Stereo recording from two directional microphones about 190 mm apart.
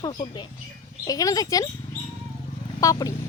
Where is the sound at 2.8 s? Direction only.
15° left (ahead or behind).